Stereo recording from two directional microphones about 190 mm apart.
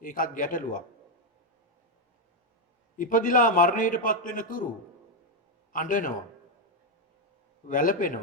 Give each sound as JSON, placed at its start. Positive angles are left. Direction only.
{"t": 0.0, "sound": "a man's voice", "side_deg": 45}
{"t": 3.0, "sound": "a man's voice", "side_deg": 45}
{"t": 5.7, "sound": "a man's voice", "side_deg": 45}
{"t": 7.7, "sound": "a man's voice", "side_deg": 45}